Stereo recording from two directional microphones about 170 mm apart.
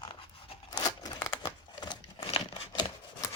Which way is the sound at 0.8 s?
20° left (ahead or behind).